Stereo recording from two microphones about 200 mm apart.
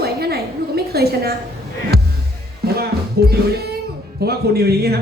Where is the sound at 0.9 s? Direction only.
50° right (ahead or behind).